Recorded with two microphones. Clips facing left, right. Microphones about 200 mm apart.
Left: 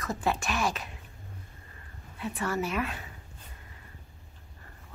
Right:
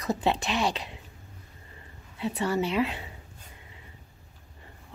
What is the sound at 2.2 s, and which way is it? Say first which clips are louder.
Speech: right 4 dB; 25° right (ahead or behind).